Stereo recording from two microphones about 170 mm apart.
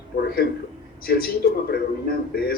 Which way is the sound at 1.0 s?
60° left (ahead or behind).